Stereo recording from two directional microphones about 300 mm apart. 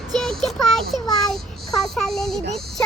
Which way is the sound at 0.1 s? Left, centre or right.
Centre.